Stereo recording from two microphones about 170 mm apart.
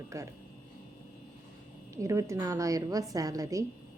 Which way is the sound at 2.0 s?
15° right (ahead or behind).